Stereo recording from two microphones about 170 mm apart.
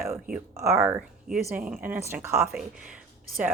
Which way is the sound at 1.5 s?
5° right (ahead or behind).